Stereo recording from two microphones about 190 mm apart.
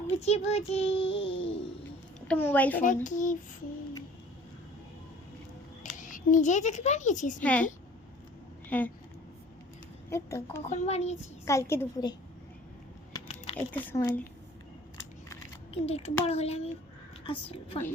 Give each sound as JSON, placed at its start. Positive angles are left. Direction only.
{"t": 0.2, "sound": "a child's voice", "side_deg": 35}
{"t": 2.2, "sound": "a woman's voice", "side_deg": 10}
{"t": 2.8, "sound": "speech", "side_deg": 40}
{"t": 5.8, "sound": "a woman's voice", "side_deg": 45}
{"t": 8.7, "sound": "a woman's voice", "side_deg": 10}
{"t": 10.1, "sound": "a woman's voice", "side_deg": 15}
{"t": 10.7, "sound": "a child's voice", "side_deg": 35}
{"t": 11.4, "sound": "a woman's voice", "side_deg": 15}
{"t": 13.1, "sound": "a sound", "side_deg": 30}
{"t": 13.7, "sound": "a woman's voice", "side_deg": 15}
{"t": 15.7, "sound": "a child's voice", "side_deg": 30}